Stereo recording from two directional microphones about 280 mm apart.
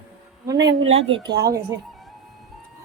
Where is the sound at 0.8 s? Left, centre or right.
Centre.